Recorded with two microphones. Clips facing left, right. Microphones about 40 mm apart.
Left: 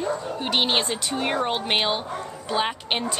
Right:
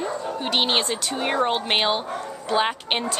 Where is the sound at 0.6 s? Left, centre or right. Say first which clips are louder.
Even; centre.